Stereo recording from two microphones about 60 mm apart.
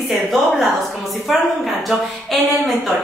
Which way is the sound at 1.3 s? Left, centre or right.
Centre.